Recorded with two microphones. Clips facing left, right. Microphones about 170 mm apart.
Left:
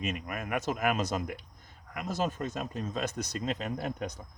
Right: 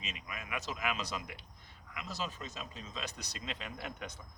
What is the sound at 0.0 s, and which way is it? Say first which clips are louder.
Speech: left 11 dB; 50° left (ahead or behind).